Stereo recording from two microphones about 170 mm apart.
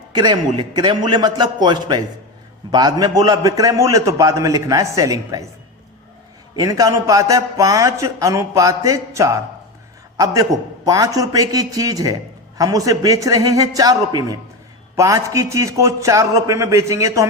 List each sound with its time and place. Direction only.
0.1 s speech: 25° right (ahead or behind)
6.6 s speech: 20° right (ahead or behind)